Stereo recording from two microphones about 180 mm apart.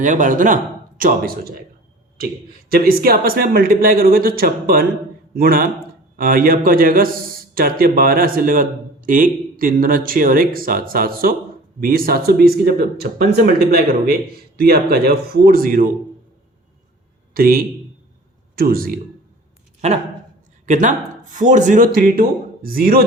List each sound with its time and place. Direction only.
0.0 s a man's voice: 45° right (ahead or behind)
17.3 s speech: 55° right (ahead or behind)
19.8 s a man's voice: 40° right (ahead or behind); by 23.0 s 55° right (ahead or behind)